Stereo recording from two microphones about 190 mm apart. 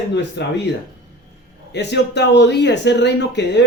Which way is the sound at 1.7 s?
65° left (ahead or behind).